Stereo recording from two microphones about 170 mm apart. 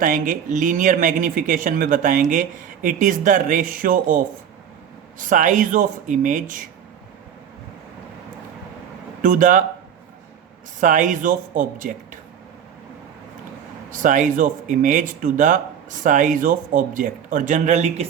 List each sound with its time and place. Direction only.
0.0 s speech: 50° right (ahead or behind)
5.2 s speech: 50° right (ahead or behind)
9.2 s speech: 50° right (ahead or behind)
10.8 s speech: 50° right (ahead or behind)
13.9 s speech: 50° right (ahead or behind)